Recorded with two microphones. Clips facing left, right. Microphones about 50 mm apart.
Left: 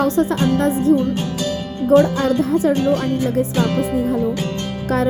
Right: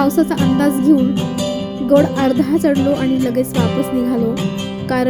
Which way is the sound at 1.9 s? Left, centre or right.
Right.